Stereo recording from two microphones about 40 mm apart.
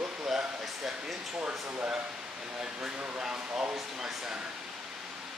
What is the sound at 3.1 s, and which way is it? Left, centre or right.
Speech, right.